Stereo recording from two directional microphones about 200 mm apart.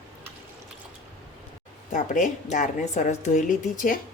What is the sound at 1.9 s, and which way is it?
A woman's voice, 40° left (ahead or behind).